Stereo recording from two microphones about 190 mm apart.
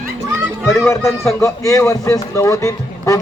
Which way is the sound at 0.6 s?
15° left (ahead or behind).